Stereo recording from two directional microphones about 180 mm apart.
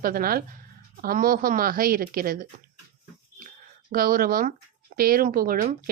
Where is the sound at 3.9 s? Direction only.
55° right (ahead or behind).